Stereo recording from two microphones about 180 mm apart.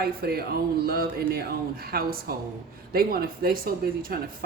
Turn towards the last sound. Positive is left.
turn(degrees=-55)  # may be behind; listen again after turning